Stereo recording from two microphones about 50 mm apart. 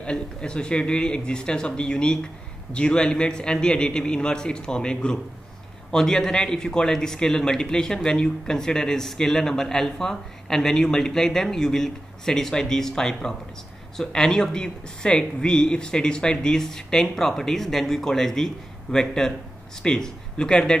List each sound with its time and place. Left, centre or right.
0.0 s speech: centre